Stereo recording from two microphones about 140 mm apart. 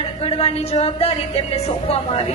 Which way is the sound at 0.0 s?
45° left (ahead or behind).